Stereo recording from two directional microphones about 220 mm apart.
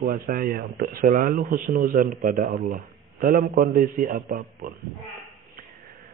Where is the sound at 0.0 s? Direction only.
40° right (ahead or behind).